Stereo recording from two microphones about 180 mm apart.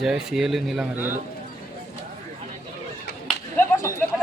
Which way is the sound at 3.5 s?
15° left (ahead or behind).